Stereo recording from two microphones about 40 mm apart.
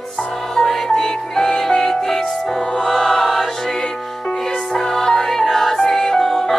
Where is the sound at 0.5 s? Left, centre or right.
Centre.